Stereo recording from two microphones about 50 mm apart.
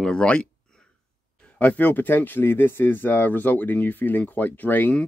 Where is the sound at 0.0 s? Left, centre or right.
Centre.